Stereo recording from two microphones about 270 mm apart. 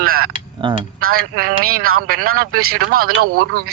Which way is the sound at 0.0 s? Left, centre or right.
Right.